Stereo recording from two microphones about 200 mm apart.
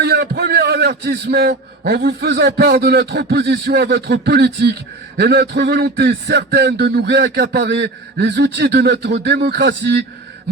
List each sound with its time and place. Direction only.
0.0 s a man's voice: 50° right (ahead or behind)